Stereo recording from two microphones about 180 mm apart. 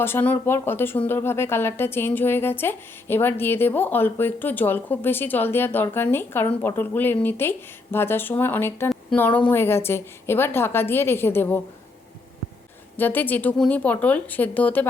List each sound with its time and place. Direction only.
0.0 s speech: 10° left (ahead or behind)
13.0 s speech: 10° left (ahead or behind)